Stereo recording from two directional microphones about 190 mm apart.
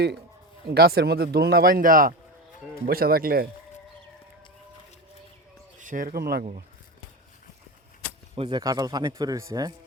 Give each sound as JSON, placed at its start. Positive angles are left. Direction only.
{"t": 0.7, "sound": "speech", "side_deg": -55}
{"t": 5.8, "sound": "speech", "side_deg": -45}
{"t": 8.4, "sound": "speech", "side_deg": -20}